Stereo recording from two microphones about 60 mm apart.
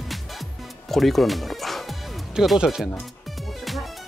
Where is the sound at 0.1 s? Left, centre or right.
Centre.